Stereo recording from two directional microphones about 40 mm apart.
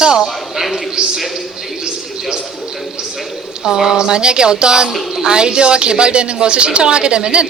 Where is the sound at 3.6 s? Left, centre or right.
Centre.